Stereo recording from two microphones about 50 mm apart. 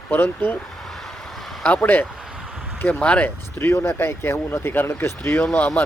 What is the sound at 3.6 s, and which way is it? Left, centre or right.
Speech, left.